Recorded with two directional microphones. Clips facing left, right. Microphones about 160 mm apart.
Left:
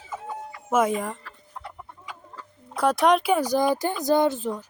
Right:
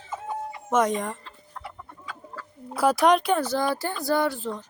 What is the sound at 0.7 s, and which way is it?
Speech, 5° left (ahead or behind).